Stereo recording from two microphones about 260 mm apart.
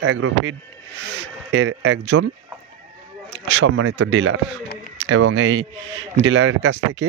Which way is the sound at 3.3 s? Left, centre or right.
Right.